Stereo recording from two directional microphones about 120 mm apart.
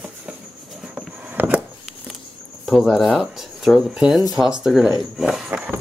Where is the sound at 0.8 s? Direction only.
10° right (ahead or behind).